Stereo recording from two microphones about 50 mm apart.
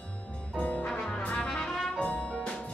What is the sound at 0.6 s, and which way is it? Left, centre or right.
Music, left.